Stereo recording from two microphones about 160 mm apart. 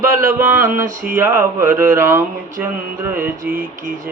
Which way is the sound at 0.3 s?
10° right (ahead or behind).